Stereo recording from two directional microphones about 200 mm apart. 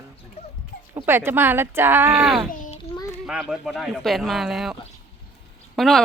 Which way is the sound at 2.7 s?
25° left (ahead or behind).